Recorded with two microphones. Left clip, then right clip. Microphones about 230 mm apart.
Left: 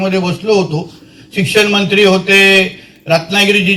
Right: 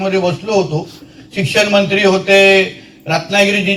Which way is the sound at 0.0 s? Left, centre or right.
Left.